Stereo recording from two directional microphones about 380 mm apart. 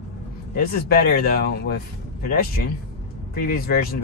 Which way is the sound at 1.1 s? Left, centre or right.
Left.